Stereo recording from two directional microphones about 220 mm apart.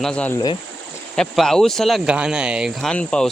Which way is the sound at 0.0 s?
5° left (ahead or behind).